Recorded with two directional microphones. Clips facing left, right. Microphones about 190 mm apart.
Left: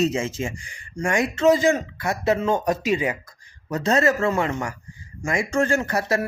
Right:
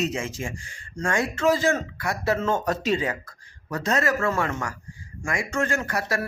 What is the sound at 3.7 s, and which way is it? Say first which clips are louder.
Speech: left 4 dB; 25° left (ahead or behind).